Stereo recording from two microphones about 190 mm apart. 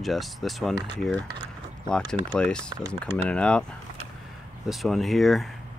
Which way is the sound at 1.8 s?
5° left (ahead or behind).